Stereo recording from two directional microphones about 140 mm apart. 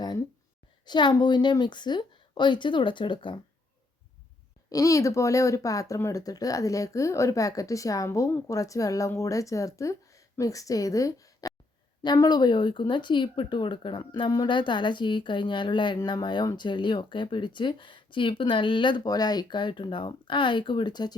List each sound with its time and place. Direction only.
0.9 s speech: 30° left (ahead or behind)
4.7 s speech: 25° left (ahead or behind)